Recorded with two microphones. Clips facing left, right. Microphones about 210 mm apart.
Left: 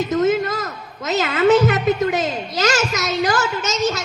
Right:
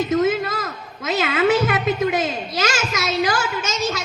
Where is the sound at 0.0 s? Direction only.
45° left (ahead or behind).